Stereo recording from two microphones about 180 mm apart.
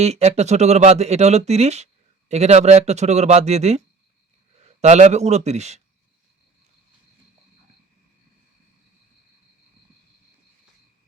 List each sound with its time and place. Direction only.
0.0 s speech: 35° right (ahead or behind)